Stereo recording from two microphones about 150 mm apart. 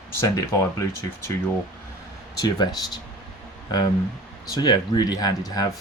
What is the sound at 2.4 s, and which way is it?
Speech, 25° left (ahead or behind).